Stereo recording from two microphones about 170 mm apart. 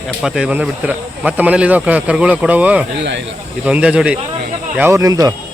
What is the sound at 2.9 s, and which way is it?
Speech, 90° right.